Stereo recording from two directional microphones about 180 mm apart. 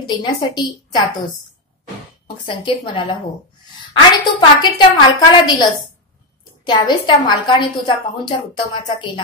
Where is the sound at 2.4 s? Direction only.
25° left (ahead or behind).